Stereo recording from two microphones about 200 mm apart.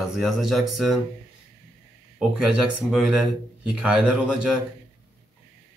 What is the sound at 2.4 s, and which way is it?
Speech, 5° right (ahead or behind).